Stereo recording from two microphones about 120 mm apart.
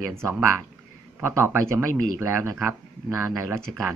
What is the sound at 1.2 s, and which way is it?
Speech, 20° right (ahead or behind).